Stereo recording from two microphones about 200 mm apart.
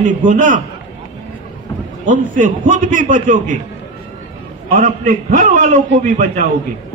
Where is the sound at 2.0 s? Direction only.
40° right (ahead or behind).